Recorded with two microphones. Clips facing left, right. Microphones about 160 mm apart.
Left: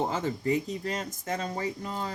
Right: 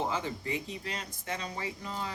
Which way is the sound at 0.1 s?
45° left (ahead or behind).